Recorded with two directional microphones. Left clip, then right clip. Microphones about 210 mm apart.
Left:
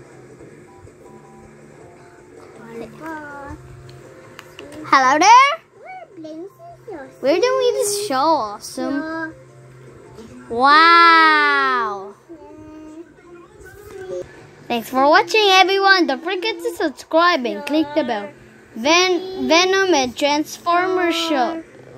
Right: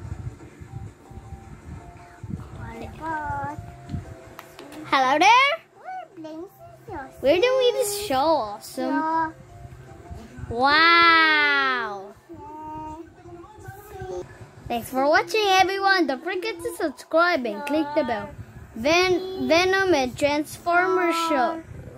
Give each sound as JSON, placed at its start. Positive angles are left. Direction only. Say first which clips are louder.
{"t": 4.8, "sound": "a child's voice", "louder": "left 6 dB", "side_deg": 5}
{"t": 7.2, "sound": "a woman's voice", "louder": "left 2 dB", "side_deg": 0}
{"t": 9.0, "sound": "music", "louder": "right 3 dB", "side_deg": -15}
{"t": 10.5, "sound": "a sound", "louder": "left 6 dB", "side_deg": 5}
{"t": 14.7, "sound": "a woman's voice", "louder": "left 6 dB", "side_deg": 10}